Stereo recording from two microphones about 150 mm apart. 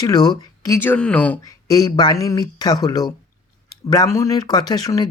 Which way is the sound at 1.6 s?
25° left (ahead or behind).